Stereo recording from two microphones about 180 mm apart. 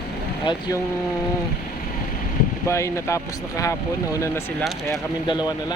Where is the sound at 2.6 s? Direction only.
15° left (ahead or behind).